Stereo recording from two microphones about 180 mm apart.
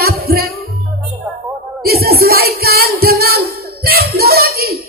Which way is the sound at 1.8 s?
60° right (ahead or behind).